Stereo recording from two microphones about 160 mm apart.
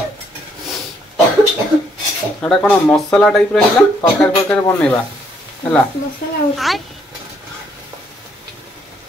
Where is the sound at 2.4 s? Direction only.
5° left (ahead or behind).